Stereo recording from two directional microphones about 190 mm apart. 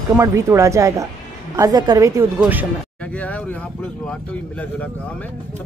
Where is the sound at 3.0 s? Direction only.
5° left (ahead or behind).